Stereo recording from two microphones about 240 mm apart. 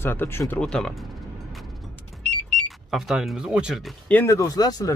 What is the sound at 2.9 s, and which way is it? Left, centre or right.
Speech, centre.